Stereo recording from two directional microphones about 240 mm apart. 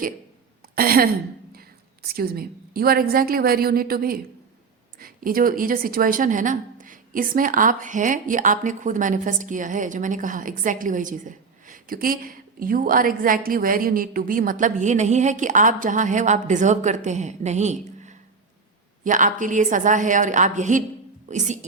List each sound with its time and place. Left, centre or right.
0.8 s a woman's voice: right